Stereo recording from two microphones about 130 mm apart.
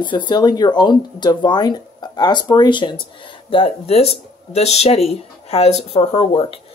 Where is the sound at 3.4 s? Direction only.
45° left (ahead or behind).